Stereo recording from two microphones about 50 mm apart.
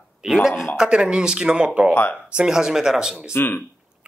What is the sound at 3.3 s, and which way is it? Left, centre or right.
Speech, left.